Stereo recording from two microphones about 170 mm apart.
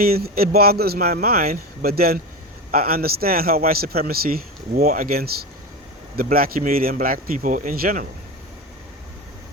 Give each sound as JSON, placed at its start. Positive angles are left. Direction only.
{"t": 0.0, "sound": "a man's voice", "side_deg": -60}